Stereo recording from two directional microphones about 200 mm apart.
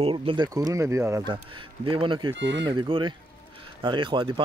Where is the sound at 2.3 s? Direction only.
65° right (ahead or behind).